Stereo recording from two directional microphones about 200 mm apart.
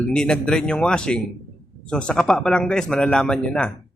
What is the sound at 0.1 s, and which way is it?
Speech, 5° left (ahead or behind).